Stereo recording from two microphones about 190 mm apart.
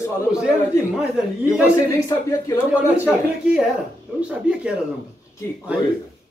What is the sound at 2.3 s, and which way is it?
Speech, 15° left (ahead or behind).